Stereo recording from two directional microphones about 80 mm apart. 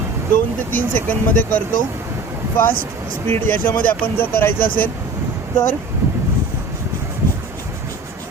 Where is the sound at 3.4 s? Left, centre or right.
Left.